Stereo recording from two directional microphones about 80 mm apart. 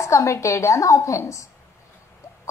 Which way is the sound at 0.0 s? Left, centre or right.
Left.